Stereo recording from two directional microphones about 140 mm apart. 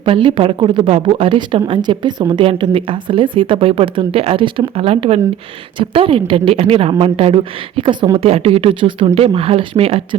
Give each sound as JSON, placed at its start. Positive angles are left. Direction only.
{"t": 0.0, "sound": "speech", "side_deg": -40}
{"t": 2.4, "sound": "speech", "side_deg": -40}